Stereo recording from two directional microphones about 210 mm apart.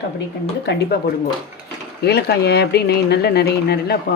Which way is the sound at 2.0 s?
50° left (ahead or behind).